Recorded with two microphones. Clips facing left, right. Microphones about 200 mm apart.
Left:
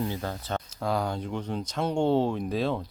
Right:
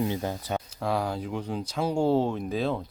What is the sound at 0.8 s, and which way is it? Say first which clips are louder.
Speech: even; 5° right (ahead or behind).